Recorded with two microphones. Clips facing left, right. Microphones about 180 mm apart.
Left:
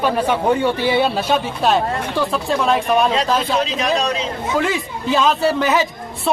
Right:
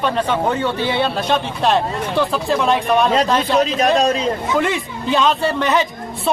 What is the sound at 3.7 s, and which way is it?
Speech, 45° right (ahead or behind).